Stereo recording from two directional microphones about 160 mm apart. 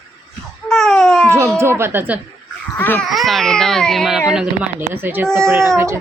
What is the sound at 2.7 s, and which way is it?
Speech, 10° left (ahead or behind).